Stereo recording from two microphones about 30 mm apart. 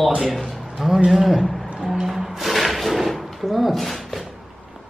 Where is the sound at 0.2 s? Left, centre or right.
Centre.